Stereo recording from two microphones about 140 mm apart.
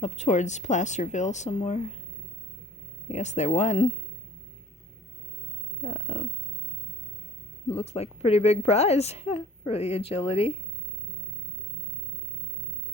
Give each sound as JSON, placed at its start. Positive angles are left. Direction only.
{"t": 0.0, "sound": "speech", "side_deg": 55}
{"t": 3.1, "sound": "a woman's voice", "side_deg": 55}
{"t": 5.8, "sound": "a woman's voice", "side_deg": 50}
{"t": 7.8, "sound": "a woman's voice", "side_deg": 50}